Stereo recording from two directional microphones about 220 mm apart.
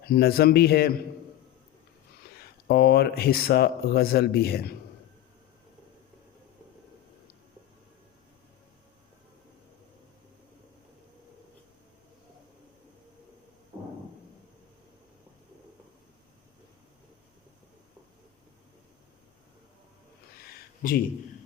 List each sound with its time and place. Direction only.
0.0 s speech: 45° left (ahead or behind)
2.3 s speech: 45° left (ahead or behind)
20.4 s a sound: 45° left (ahead or behind)